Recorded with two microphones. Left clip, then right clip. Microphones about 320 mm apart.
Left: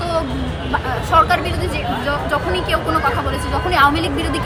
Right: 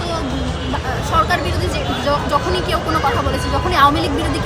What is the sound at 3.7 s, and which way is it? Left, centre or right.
Music, centre.